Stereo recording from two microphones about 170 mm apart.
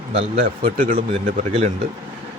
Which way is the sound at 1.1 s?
40° right (ahead or behind).